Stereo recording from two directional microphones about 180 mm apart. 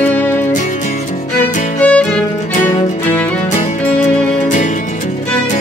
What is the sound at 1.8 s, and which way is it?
Music, 5° left (ahead or behind).